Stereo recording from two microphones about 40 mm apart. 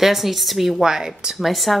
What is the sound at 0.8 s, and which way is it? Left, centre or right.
Speech, centre.